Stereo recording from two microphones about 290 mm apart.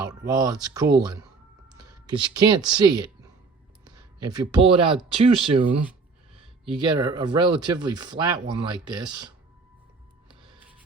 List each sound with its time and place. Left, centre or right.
0.0 s speech: centre